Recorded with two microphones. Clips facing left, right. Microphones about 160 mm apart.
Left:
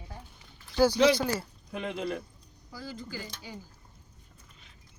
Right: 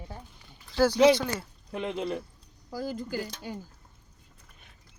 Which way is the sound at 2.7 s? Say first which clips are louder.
Right 7 dB; 45° right (ahead or behind).